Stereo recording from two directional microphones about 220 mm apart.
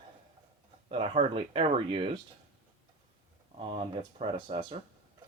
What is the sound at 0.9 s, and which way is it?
Speech, 25° right (ahead or behind).